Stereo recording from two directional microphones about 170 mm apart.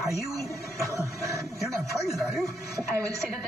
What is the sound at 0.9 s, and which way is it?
Music, 20° right (ahead or behind).